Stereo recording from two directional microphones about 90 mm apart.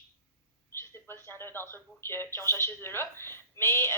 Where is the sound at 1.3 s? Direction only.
25° left (ahead or behind).